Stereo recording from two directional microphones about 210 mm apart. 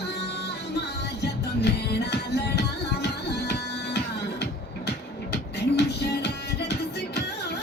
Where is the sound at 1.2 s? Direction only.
50° left (ahead or behind).